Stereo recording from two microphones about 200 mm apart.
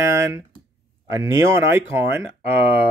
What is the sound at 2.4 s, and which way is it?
Speech, 60° right (ahead or behind).